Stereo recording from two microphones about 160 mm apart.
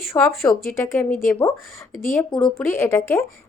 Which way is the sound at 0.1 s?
15° left (ahead or behind).